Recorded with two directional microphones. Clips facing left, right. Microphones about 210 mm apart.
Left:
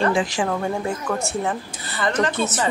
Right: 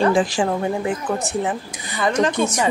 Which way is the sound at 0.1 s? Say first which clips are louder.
Right 3 dB; 35° right (ahead or behind).